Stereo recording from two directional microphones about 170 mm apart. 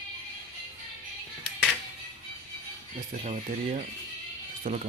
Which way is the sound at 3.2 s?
40° right (ahead or behind).